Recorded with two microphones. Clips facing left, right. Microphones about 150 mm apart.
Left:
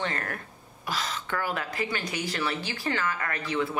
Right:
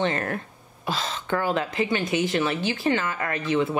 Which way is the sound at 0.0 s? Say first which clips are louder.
Right 7 dB; 25° right (ahead or behind).